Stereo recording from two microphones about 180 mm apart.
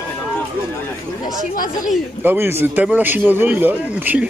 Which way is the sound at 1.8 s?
5° right (ahead or behind).